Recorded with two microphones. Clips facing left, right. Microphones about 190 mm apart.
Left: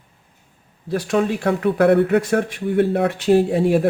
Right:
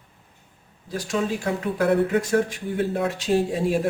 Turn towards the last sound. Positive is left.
turn(degrees=60)  # may be behind; listen again after turning